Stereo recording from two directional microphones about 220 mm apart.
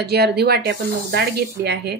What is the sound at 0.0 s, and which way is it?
Speech, 45° right (ahead or behind).